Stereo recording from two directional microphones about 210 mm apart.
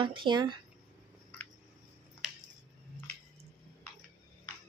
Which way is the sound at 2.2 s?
5° right (ahead or behind).